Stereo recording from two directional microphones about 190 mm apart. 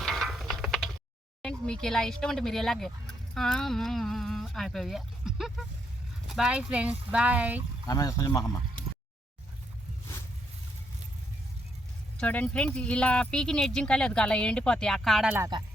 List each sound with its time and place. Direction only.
0.0 s a sound: centre (ahead or behind)
1.4 s speech: 5° left (ahead or behind)
7.9 s speech: 20° left (ahead or behind)
12.2 s speech: 10° left (ahead or behind)